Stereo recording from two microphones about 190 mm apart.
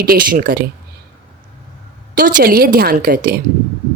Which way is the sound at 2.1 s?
45° right (ahead or behind).